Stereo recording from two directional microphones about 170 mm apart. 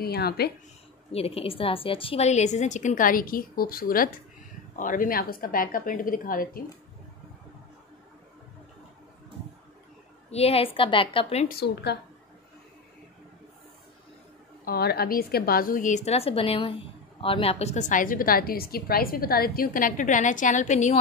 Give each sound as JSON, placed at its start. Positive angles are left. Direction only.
{"t": 0.0, "sound": "a woman's voice", "side_deg": 70}
{"t": 1.1, "sound": "a woman's voice", "side_deg": 35}
{"t": 10.3, "sound": "a woman's voice", "side_deg": 35}
{"t": 11.4, "sound": "a woman's voice", "side_deg": 70}
{"t": 14.6, "sound": "a woman's voice", "side_deg": 65}